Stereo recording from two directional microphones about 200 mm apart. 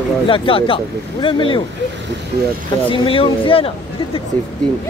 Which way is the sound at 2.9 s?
25° left (ahead or behind).